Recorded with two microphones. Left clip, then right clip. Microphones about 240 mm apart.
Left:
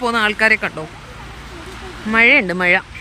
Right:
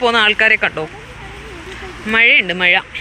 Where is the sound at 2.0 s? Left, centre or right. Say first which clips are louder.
Right 1 dB; centre.